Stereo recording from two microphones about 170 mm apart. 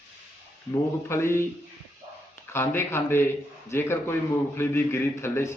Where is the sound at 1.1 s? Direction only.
15° left (ahead or behind).